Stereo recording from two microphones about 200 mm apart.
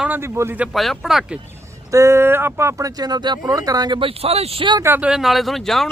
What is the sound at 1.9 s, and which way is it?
Speech, 15° right (ahead or behind).